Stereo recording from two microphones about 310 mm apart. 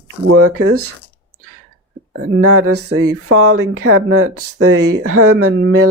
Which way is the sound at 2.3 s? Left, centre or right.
Right.